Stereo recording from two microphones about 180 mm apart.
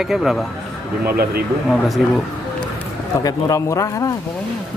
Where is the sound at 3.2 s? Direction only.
20° left (ahead or behind).